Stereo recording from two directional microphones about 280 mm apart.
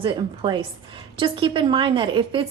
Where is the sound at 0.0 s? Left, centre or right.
Centre.